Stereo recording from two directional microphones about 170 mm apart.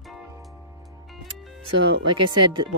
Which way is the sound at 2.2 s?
30° right (ahead or behind).